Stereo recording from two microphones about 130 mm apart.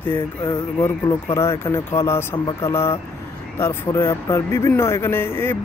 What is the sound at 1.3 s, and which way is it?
Speech, 20° left (ahead or behind).